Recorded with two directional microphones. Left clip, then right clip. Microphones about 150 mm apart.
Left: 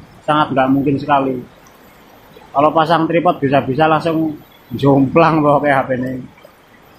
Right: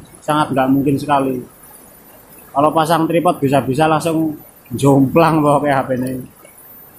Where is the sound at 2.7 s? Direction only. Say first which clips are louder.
Left 1 dB; 20° right (ahead or behind).